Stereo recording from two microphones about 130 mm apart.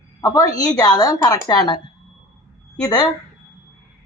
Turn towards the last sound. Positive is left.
turn(degrees=30)  # may be behind; listen again after turning